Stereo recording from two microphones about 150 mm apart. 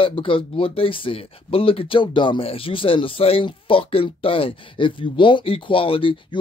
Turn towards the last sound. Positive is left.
turn(degrees=35)  # may be behind; listen again after turning